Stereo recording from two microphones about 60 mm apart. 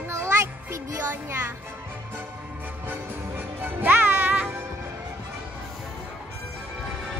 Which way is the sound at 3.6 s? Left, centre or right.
Right.